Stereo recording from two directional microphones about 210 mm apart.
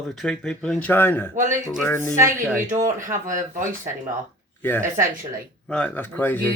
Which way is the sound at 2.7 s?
35° right (ahead or behind).